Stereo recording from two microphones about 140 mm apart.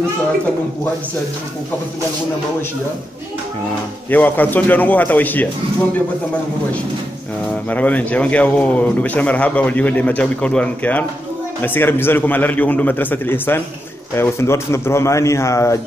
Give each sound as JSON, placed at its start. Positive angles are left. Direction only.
{"t": 4.1, "sound": "a man's voice", "side_deg": 10}
{"t": 7.7, "sound": "a man's voice", "side_deg": 10}